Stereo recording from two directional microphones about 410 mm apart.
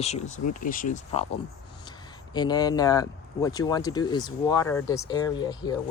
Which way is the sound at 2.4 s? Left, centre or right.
Centre.